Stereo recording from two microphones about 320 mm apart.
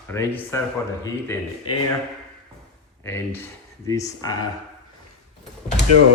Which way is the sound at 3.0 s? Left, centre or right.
Centre.